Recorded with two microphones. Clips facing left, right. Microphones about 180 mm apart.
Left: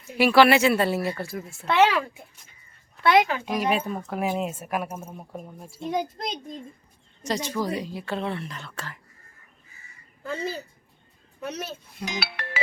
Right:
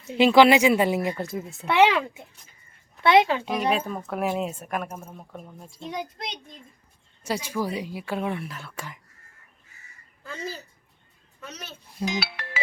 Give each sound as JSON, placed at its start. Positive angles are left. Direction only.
{"t": 0.1, "sound": "speech", "side_deg": -20}
{"t": 3.6, "sound": "speech", "side_deg": 5}
{"t": 5.9, "sound": "a child's voice", "side_deg": 45}
{"t": 7.2, "sound": "a woman's voice", "side_deg": -10}
{"t": 12.0, "sound": "speech", "side_deg": 65}